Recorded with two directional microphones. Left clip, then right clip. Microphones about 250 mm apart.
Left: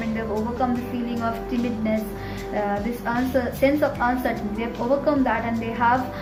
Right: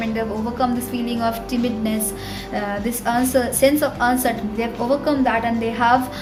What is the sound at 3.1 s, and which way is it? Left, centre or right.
A woman's voice, right.